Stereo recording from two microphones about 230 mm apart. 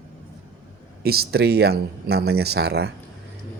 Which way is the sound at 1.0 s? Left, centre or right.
Right.